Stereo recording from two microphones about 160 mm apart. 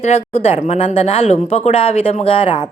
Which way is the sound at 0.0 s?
40° left (ahead or behind).